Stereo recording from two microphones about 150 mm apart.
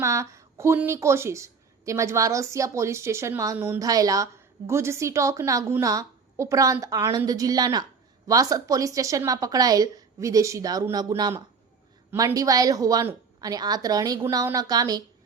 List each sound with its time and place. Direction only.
0.0 s a woman's voice: 20° right (ahead or behind)